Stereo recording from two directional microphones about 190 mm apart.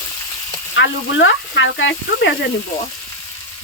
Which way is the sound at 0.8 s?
80° left.